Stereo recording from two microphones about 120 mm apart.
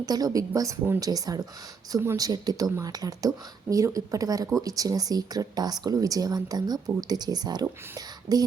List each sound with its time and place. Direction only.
0.0 s speech: 30° right (ahead or behind)